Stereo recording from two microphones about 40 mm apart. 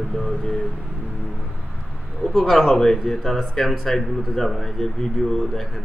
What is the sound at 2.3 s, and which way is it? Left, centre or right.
Speech, centre.